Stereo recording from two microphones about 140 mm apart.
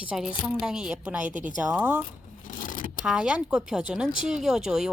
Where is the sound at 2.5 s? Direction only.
75° left (ahead or behind).